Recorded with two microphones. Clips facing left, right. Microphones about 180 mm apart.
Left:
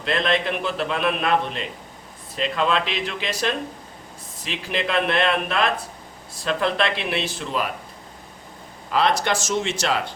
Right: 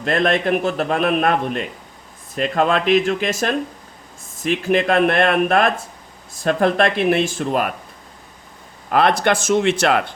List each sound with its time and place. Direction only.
0.0 s a man's voice: 50° right (ahead or behind)
8.9 s speech: 55° right (ahead or behind)